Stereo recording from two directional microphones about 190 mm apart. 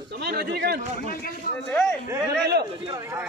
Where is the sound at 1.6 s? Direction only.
5° left (ahead or behind).